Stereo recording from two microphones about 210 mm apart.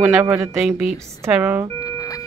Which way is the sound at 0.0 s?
15° right (ahead or behind).